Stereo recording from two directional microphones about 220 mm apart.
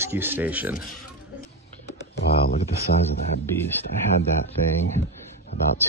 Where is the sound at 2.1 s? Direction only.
45° left (ahead or behind).